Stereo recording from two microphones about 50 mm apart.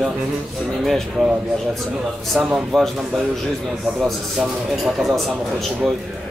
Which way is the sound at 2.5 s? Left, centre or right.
Centre.